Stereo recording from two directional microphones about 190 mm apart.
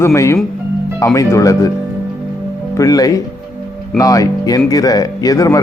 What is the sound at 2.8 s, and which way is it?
Speech, 20° left (ahead or behind).